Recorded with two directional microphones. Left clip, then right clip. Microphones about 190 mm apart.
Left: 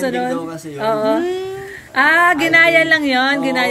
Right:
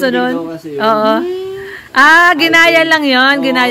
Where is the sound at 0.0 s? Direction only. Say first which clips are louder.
Right 5 dB; 20° right (ahead or behind).